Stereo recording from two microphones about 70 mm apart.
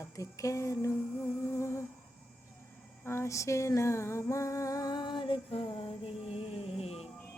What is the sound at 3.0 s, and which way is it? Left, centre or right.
Speech, left.